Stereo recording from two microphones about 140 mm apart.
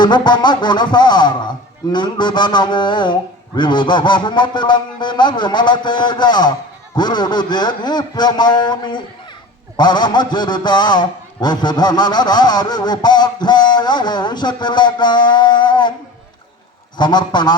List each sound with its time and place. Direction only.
0.0 s a man's voice: 30° left (ahead or behind)
17.0 s a man's voice: 30° left (ahead or behind)